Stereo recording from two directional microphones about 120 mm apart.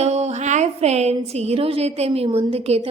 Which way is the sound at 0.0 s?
65° right (ahead or behind).